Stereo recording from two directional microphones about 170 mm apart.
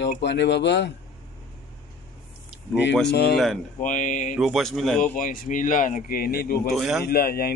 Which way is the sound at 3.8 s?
45° left (ahead or behind).